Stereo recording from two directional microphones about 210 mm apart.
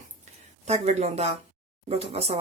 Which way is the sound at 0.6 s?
30° right (ahead or behind).